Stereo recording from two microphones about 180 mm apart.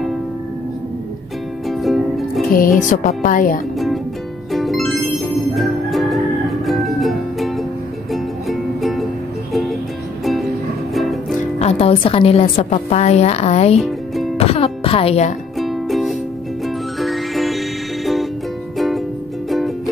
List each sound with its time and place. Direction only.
1.7 s music: centre (ahead or behind)
2.5 s music: 50° left (ahead or behind)
4.5 s music: centre (ahead or behind)
11.0 s music: centre (ahead or behind)
11.6 s a woman's voice: 35° left (ahead or behind)
13.7 s music: centre (ahead or behind)
14.4 s speech: 30° left (ahead or behind)
15.6 s music: centre (ahead or behind)